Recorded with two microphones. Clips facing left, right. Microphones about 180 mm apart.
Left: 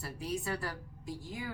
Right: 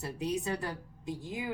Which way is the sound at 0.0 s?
20° right (ahead or behind).